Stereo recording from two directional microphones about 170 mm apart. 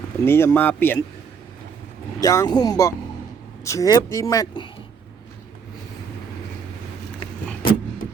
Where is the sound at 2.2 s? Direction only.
20° left (ahead or behind).